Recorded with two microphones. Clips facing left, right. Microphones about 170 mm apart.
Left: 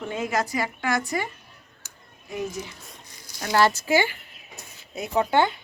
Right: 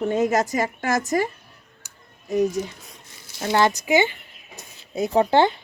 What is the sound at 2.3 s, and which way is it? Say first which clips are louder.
Speech: right 9 dB; 40° right (ahead or behind).